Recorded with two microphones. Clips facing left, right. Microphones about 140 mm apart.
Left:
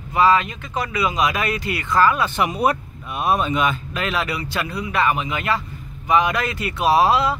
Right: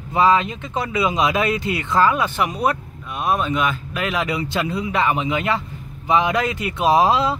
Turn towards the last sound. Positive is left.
turn(degrees=-20)  # may be behind; listen again after turning